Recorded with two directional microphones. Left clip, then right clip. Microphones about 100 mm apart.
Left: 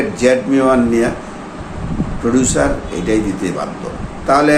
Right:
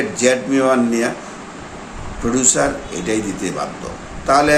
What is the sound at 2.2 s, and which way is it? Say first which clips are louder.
A man's voice: left 2 dB; 15° right (ahead or behind).